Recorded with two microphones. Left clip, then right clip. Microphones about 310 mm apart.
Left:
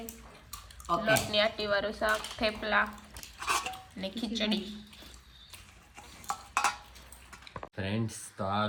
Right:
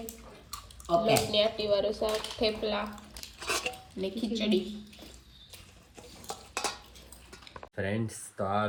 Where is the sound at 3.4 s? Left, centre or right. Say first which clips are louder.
Left 1 dB; centre.